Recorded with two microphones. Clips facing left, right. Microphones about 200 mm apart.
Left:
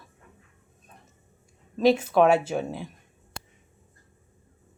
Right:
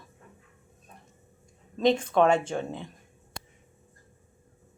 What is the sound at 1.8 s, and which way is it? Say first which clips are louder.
Speech: left 3 dB; 5° left (ahead or behind).